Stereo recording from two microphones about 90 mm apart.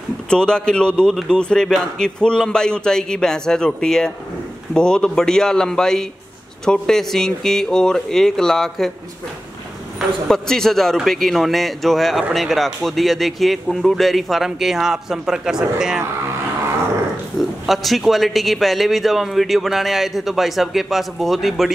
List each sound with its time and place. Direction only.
0.3 s a man's voice: 10° left (ahead or behind)
10.2 s speech: 5° left (ahead or behind)
17.4 s speech: centre (ahead or behind)